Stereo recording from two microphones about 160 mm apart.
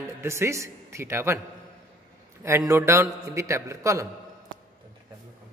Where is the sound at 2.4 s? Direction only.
20° right (ahead or behind).